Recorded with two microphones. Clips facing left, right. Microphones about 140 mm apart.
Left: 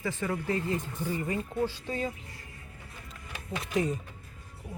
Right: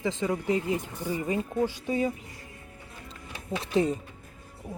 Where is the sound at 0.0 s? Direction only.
20° right (ahead or behind).